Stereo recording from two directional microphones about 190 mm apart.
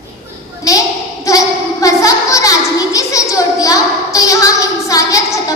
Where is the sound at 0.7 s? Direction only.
15° left (ahead or behind).